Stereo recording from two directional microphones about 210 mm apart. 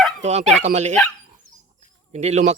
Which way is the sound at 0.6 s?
35° right (ahead or behind).